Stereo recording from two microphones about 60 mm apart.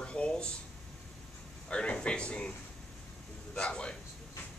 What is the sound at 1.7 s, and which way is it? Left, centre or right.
Speech, centre.